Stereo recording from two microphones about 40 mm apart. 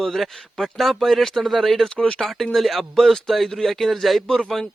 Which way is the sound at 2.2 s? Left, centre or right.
Centre.